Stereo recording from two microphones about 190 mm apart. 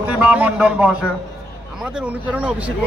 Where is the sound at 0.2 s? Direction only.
5° right (ahead or behind).